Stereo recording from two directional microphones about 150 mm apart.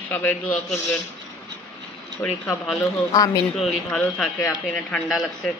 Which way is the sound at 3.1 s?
20° left (ahead or behind).